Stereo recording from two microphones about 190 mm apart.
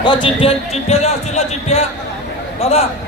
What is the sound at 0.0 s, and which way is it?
A man's voice, 25° left (ahead or behind).